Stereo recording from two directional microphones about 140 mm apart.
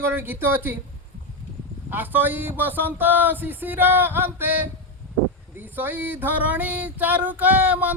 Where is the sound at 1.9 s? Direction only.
15° right (ahead or behind).